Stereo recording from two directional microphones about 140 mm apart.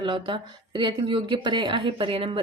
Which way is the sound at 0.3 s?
35° right (ahead or behind).